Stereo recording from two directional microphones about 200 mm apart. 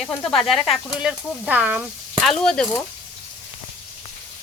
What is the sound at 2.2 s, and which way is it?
Speech, centre (ahead or behind).